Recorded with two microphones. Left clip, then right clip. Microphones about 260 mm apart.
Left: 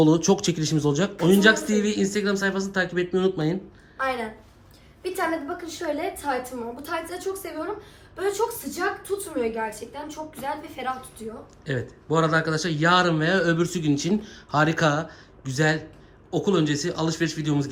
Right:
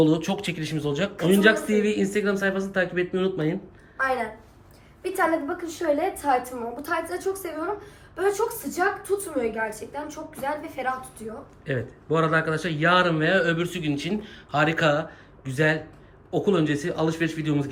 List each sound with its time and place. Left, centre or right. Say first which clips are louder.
0.0 s a woman's voice: left 3 dB; centre